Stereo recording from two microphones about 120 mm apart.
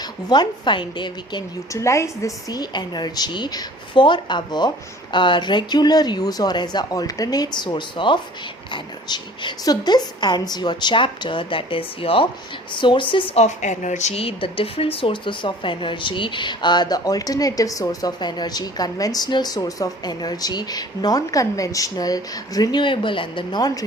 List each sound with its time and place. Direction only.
0.0 s speech: 35° left (ahead or behind)
1.7 s speech: 25° left (ahead or behind); by 13.3 s 45° left (ahead or behind)
13.3 s speech: 75° left (ahead or behind); by 23.8 s 35° left (ahead or behind)